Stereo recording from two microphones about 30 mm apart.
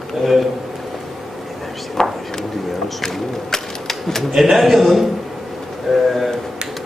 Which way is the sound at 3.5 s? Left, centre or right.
Centre.